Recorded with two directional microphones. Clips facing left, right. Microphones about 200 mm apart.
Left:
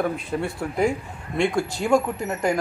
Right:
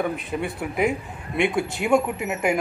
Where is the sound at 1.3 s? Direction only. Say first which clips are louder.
Even; 20° right (ahead or behind).